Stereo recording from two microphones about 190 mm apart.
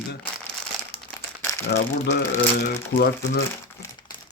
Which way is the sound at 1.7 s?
60° left (ahead or behind).